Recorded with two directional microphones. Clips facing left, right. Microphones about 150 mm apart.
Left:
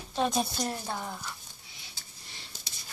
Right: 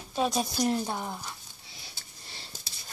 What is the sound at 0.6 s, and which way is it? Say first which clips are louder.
Speech: right 5 dB; 15° right (ahead or behind).